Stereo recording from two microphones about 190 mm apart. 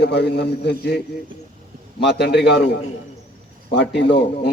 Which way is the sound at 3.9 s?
65° left (ahead or behind).